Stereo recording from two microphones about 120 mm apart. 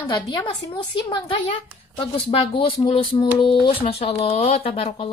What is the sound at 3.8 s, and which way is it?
A woman's voice, 60° left (ahead or behind).